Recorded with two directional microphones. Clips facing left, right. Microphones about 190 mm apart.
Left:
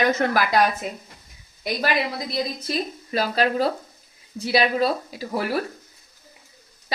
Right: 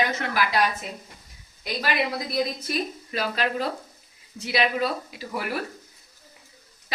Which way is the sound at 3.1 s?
35° left (ahead or behind).